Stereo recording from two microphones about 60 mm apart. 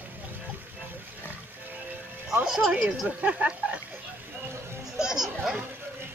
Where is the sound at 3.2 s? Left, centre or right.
Right.